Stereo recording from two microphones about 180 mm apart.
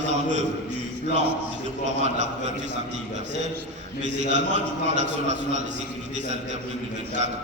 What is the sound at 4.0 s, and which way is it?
Speech, 40° right (ahead or behind).